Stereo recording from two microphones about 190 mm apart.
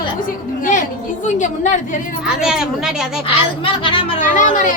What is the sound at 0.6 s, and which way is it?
A woman's voice, 40° left (ahead or behind).